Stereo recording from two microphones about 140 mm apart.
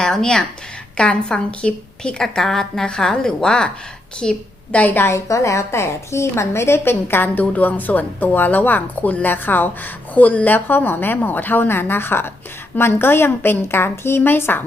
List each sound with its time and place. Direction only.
0.0 s a woman's voice: 5° left (ahead or behind)